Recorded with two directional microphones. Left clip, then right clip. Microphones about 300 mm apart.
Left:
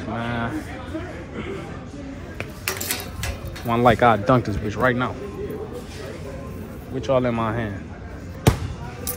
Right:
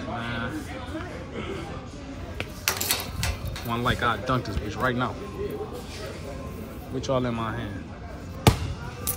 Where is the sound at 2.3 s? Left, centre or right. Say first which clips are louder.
Right 1 dB; centre.